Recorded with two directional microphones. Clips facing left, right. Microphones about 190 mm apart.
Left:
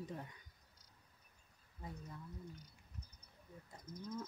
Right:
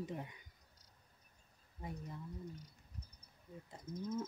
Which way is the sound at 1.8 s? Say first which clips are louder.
Right 4 dB; 20° right (ahead or behind).